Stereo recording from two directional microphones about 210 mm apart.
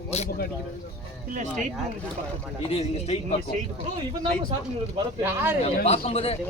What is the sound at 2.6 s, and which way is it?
Speech, 30° left (ahead or behind).